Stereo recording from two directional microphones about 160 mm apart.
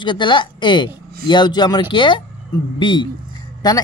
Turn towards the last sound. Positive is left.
turn(degrees=25)  # may be behind; listen again after turning